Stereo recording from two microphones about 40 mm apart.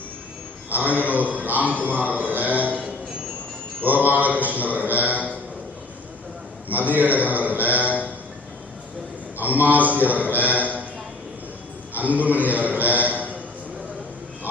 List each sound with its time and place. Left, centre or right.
0.7 s mantra: right
6.7 s mantra: right
7.3 s music: right
9.4 s mantra: right
11.9 s a man's voice: right